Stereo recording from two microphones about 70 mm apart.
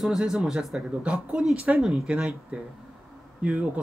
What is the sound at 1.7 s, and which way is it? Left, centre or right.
Speech, centre.